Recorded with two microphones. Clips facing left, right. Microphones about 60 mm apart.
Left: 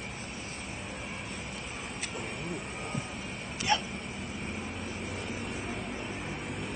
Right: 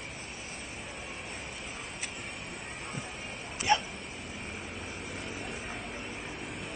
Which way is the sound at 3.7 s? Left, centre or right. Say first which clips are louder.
Right 2 dB; right.